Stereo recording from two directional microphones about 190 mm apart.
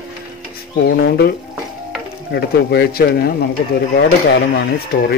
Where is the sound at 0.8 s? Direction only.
60° left (ahead or behind).